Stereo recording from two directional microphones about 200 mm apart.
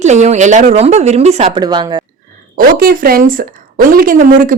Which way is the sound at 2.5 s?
45° right (ahead or behind).